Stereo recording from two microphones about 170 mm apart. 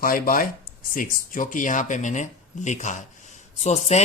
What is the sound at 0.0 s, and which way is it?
Speech, 55° left (ahead or behind).